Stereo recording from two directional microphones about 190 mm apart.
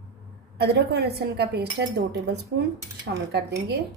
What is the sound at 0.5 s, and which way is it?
A woman's voice, 60° right (ahead or behind).